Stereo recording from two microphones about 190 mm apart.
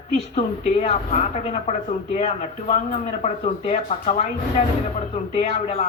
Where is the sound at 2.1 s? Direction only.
35° left (ahead or behind).